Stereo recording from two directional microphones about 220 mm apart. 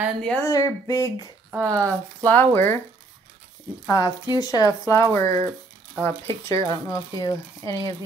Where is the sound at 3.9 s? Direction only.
15° left (ahead or behind).